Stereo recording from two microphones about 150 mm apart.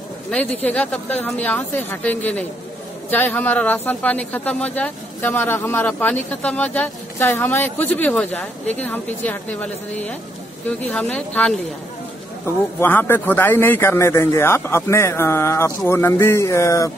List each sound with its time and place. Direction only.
0.7 s speech: 10° left (ahead or behind)